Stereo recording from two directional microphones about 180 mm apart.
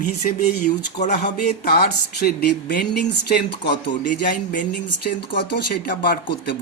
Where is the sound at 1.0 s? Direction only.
40° left (ahead or behind).